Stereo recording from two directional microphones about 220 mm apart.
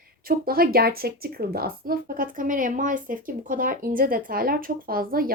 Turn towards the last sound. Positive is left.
turn(degrees=-40)  # may be behind; listen again after turning